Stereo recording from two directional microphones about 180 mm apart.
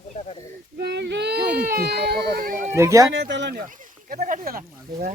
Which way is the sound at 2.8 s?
15° right (ahead or behind).